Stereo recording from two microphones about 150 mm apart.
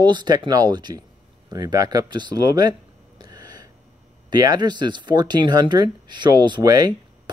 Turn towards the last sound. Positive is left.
turn(degrees=-25)  # may be behind; listen again after turning